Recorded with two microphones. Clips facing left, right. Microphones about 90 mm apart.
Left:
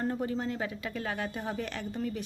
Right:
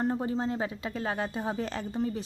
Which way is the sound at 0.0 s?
25° right (ahead or behind).